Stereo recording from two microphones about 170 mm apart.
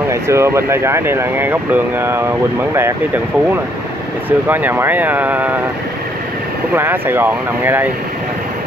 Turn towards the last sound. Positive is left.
turn(degrees=-10)  # may be behind; listen again after turning